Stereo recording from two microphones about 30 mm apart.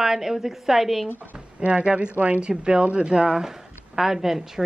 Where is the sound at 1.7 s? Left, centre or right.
Right.